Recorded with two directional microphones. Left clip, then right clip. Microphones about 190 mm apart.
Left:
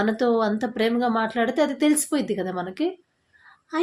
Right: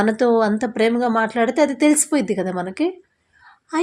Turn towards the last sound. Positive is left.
turn(degrees=-40)  # may be behind; listen again after turning